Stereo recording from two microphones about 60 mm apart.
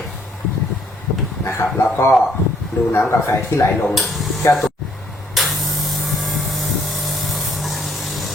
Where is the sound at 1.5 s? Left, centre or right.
Left.